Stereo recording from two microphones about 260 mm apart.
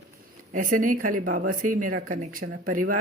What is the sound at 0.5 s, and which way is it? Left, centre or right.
Speech, right.